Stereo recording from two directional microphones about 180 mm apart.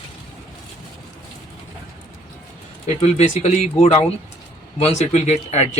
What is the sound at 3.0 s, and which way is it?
Speech, 35° left (ahead or behind).